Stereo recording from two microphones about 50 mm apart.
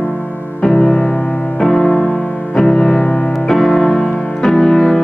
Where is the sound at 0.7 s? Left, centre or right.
Left.